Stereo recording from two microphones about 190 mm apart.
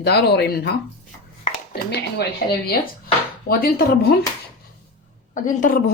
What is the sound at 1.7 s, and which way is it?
Speech, 60° left (ahead or behind).